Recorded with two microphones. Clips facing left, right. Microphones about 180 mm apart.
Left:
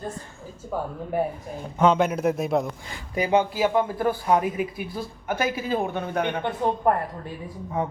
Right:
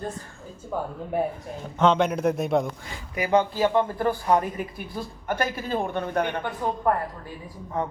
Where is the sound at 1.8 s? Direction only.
5° left (ahead or behind).